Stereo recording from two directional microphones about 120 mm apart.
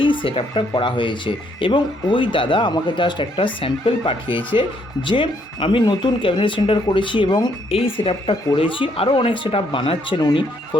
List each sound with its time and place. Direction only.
0.0 s speech: 45° left (ahead or behind)
7.7 s speech: 50° left (ahead or behind)
10.2 s speech: 35° left (ahead or behind)